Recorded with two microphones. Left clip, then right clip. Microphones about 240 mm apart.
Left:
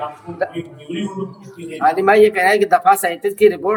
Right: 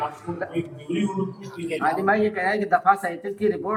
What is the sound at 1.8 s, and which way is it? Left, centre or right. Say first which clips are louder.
Speech: left 10 dB; left.